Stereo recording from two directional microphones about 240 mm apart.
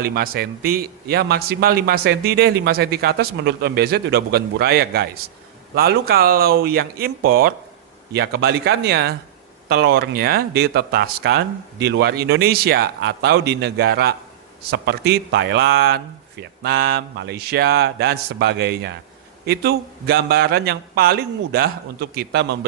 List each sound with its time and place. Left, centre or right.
0.0 s a man's voice: right